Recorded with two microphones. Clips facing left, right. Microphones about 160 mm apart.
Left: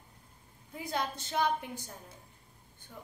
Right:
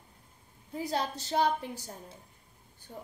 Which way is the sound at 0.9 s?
35° right (ahead or behind).